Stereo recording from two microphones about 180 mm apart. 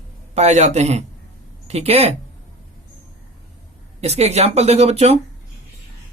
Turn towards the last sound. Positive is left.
turn(degrees=-35)  # may be behind; listen again after turning